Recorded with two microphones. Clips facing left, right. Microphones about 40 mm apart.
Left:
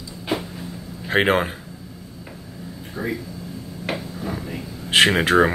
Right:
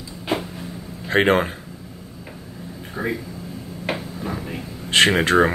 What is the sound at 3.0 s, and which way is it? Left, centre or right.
Speech, right.